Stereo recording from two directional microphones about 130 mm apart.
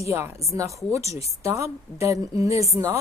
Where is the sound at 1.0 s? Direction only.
55° left (ahead or behind).